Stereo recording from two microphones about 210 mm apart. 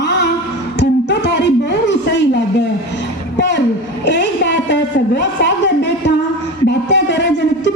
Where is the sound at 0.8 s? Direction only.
55° left (ahead or behind).